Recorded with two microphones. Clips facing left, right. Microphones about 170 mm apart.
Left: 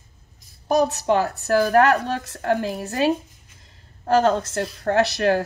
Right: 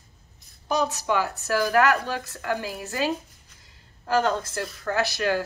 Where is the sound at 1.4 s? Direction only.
35° left (ahead or behind).